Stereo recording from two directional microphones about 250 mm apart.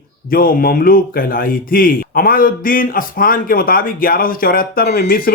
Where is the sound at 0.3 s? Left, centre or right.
Left.